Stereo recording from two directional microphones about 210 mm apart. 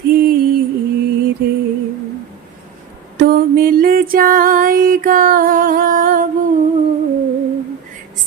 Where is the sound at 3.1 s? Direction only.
45° right (ahead or behind).